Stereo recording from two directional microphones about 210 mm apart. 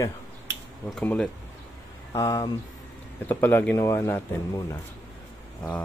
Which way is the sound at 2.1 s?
15° left (ahead or behind).